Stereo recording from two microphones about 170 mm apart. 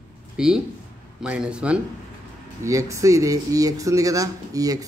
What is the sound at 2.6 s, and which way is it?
Speech, 20° right (ahead or behind).